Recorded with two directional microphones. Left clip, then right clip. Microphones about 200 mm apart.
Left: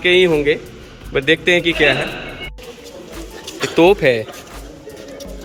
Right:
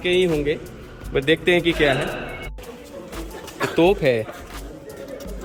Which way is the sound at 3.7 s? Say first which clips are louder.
Left 6 dB; 5° right (ahead or behind).